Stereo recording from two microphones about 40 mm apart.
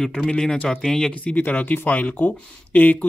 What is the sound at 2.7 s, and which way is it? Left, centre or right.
Speech, left.